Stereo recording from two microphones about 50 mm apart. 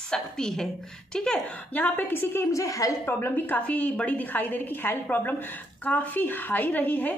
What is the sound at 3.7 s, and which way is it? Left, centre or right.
A woman's voice, left.